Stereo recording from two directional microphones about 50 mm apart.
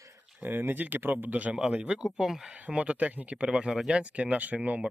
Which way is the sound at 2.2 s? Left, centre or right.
Centre.